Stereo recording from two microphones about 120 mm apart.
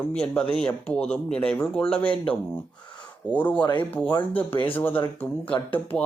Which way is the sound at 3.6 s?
40° left (ahead or behind).